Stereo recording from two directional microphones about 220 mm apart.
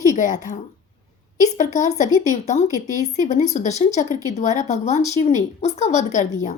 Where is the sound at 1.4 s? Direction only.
35° left (ahead or behind).